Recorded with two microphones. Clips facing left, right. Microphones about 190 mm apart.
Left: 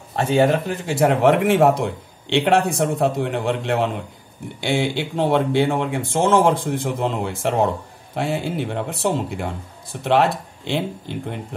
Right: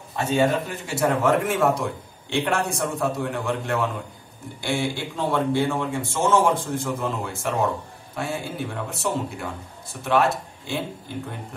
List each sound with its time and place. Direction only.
0.1 s a man's voice: 75° left (ahead or behind)
4.6 s speech: 90° left
6.6 s a man's voice: 60° left (ahead or behind)
10.6 s speech: 80° left